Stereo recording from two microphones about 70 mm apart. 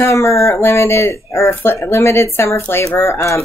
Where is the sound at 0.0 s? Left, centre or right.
Left.